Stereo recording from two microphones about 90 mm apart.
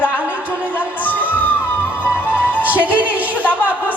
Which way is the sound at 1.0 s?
20° left (ahead or behind).